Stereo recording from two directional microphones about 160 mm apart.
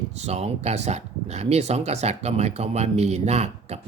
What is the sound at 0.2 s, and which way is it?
Speech, 40° right (ahead or behind).